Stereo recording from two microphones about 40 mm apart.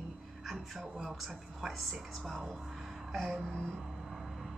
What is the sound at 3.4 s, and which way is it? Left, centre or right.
Vehicle, centre.